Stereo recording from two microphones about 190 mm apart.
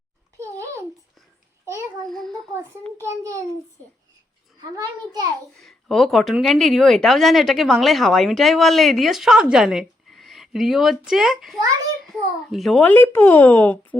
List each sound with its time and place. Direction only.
0.3 s a sound: 15° right (ahead or behind)
2.0 s speech: centre (ahead or behind)
3.0 s a child's voice: 15° right (ahead or behind)
5.6 s a child's voice: centre (ahead or behind)